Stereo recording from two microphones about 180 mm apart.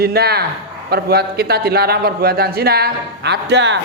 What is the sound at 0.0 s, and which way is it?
A man's voice, 60° right (ahead or behind).